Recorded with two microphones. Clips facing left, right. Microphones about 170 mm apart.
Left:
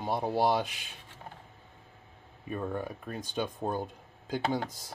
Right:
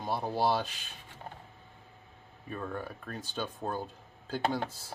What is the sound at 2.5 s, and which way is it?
Speech, 15° left (ahead or behind).